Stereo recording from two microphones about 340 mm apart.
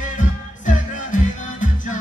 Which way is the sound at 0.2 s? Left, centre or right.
Left.